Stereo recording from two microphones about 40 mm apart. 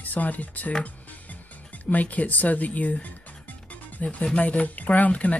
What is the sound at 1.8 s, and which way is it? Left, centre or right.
Speech, left.